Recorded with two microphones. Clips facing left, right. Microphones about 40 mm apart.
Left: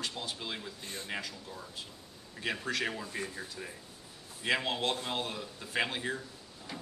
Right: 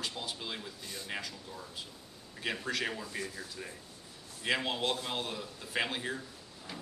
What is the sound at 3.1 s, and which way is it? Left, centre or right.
Speech, left.